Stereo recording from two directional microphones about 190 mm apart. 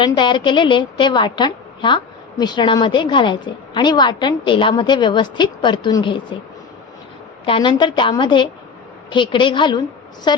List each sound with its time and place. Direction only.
0.0 s a woman's voice: 25° left (ahead or behind)
7.4 s a woman's voice: 25° left (ahead or behind)